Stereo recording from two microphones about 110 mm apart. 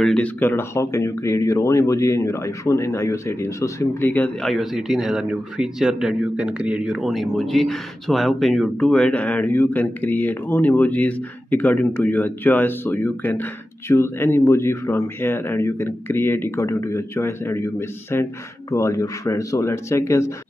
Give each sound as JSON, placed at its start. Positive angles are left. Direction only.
{"t": 0.0, "sound": "speech", "side_deg": 10}
{"t": 4.1, "sound": "speech", "side_deg": 15}
{"t": 4.5, "sound": "speech", "side_deg": 0}